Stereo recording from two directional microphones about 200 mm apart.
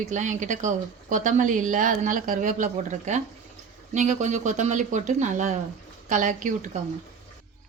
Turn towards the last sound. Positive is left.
turn(degrees=-40)  # may be behind; listen again after turning